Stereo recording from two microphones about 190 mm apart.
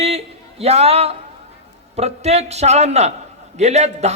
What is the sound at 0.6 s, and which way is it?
A man's voice, 35° right (ahead or behind).